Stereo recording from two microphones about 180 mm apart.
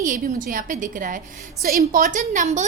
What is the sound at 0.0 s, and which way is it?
A woman's voice, 45° right (ahead or behind).